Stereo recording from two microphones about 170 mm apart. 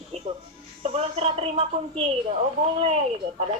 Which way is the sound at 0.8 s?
35° right (ahead or behind).